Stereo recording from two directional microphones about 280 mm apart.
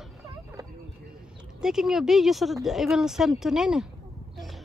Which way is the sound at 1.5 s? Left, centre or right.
Centre.